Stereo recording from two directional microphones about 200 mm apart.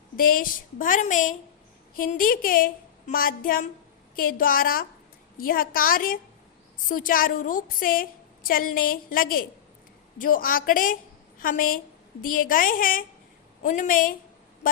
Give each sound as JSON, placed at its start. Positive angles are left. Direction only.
{"t": 0.2, "sound": "a woman's voice", "side_deg": 45}